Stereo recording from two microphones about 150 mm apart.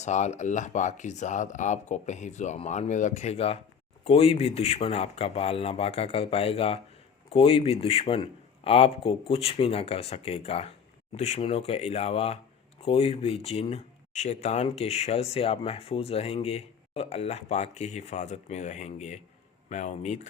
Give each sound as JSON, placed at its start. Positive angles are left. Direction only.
{"t": 0.0, "sound": "speech", "side_deg": 50}